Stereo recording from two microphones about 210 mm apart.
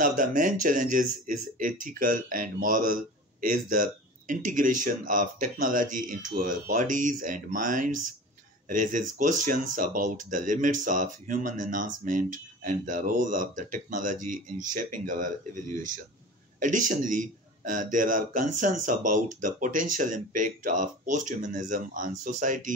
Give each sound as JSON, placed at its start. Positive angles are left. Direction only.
{"t": 0.0, "sound": "speech", "side_deg": -40}